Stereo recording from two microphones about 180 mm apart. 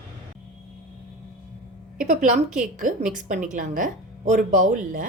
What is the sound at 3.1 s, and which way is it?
Speech, 45° right (ahead or behind).